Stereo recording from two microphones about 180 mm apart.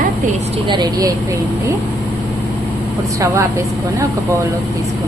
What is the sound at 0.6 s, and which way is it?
Speech, 25° right (ahead or behind).